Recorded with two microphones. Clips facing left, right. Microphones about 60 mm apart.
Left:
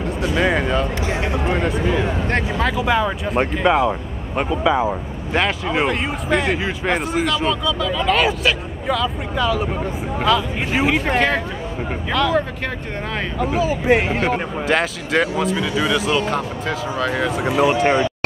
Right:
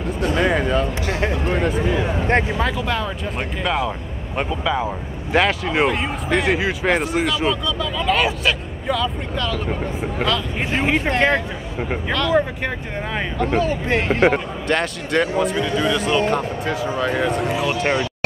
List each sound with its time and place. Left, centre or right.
0.0 s speech: centre
2.8 s speech: centre
3.6 s speech: left
4.4 s speech: centre
5.3 s speech: centre
13.4 s speech: centre
17.6 s speech: left